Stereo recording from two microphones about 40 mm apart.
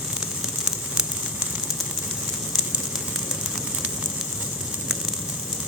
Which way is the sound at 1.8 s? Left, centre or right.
Centre.